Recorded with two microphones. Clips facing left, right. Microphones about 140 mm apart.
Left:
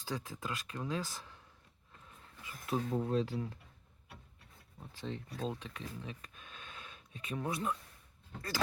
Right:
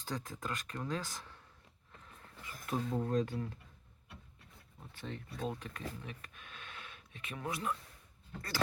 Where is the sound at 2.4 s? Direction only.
20° left (ahead or behind).